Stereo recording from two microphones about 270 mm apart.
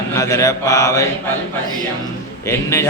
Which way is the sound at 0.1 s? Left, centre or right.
Centre.